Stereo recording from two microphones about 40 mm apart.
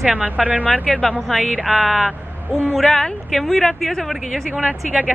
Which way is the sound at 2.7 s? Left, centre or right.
Centre.